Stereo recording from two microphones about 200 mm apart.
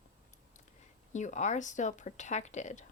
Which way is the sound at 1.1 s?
35° left (ahead or behind).